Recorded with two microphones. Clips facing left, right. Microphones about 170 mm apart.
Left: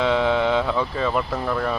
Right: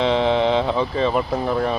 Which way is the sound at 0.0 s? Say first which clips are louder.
Right 2 dB; 25° right (ahead or behind).